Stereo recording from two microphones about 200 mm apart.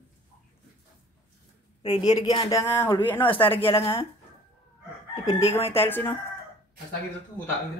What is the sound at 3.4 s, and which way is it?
Speech, 25° left (ahead or behind).